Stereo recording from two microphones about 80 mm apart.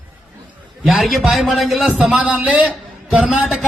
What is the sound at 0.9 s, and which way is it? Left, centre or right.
A man's voice, centre.